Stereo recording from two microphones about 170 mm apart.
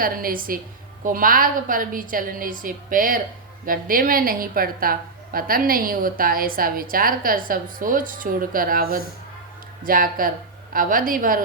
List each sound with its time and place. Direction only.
0.0 s a woman's voice: 60° right (ahead or behind)